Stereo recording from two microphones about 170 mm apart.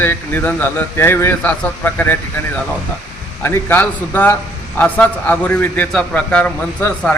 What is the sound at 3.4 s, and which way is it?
Speech, 15° left (ahead or behind).